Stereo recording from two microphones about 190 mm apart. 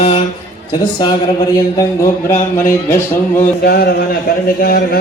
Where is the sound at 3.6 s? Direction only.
55° left (ahead or behind).